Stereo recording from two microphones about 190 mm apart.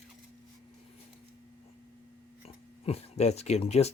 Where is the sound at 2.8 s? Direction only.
35° left (ahead or behind).